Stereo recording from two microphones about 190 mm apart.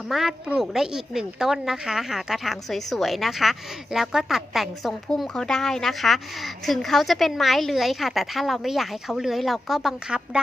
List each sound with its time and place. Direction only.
0.1 s a woman's voice: centre (ahead or behind)